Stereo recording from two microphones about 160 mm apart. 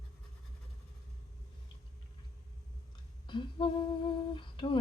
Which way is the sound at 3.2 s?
30° left (ahead or behind).